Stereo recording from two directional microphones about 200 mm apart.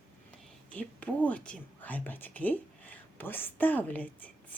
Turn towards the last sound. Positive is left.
turn(degrees=10)  # may be behind; listen again after turning